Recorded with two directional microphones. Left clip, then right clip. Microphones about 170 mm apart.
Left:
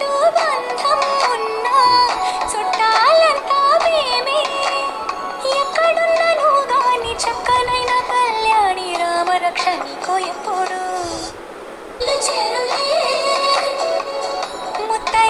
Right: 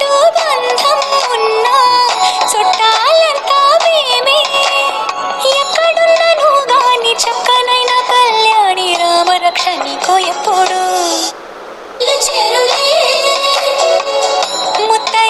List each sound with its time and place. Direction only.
0.1 s music: 30° right (ahead or behind)
1.6 s music: 30° right (ahead or behind)
12.0 s music: 30° right (ahead or behind)